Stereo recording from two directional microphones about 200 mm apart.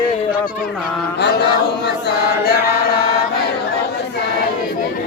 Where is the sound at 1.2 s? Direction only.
55° left (ahead or behind).